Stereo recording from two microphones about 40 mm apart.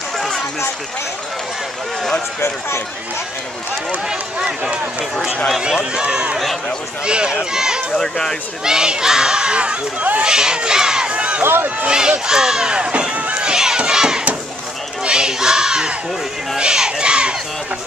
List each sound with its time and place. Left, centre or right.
4.1 s speech: right
7.9 s speech: centre
8.6 s speech: centre
10.1 s crowd: right
11.9 s speech: centre; by 13.5 s right
13.5 s a sound: centre
16.5 s speech: centre